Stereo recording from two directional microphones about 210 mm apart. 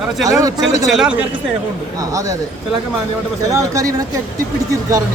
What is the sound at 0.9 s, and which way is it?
Speech, centre (ahead or behind).